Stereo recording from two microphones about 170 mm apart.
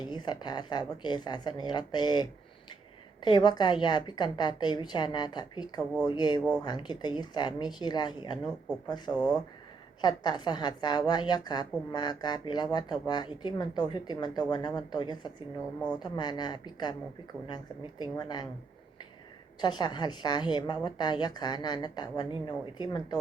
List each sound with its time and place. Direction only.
0.0 s a woman's voice: 25° left (ahead or behind)
9.1 s speech: 5° left (ahead or behind)
10.0 s a woman's voice: 25° left (ahead or behind)
18.0 s a woman's voice: 25° left (ahead or behind)
19.6 s a woman's voice: 25° left (ahead or behind)